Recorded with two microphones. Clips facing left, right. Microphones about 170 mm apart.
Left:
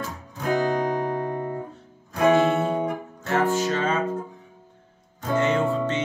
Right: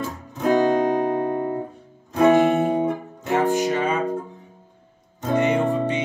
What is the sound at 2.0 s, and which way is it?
Music, 15° right (ahead or behind).